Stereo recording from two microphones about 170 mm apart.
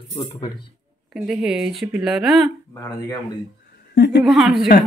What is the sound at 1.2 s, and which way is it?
Speech, centre (ahead or behind).